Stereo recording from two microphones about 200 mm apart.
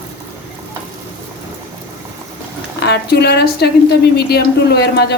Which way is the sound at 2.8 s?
55° left (ahead or behind).